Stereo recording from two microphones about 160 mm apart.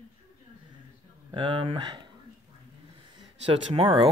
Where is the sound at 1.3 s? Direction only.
30° right (ahead or behind).